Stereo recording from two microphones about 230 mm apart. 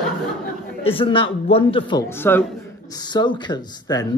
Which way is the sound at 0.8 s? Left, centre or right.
Left.